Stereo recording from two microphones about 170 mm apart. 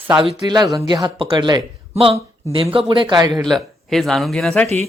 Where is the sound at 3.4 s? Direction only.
Centre (ahead or behind).